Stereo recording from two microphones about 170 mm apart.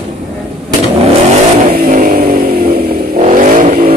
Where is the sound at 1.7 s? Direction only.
55° right (ahead or behind).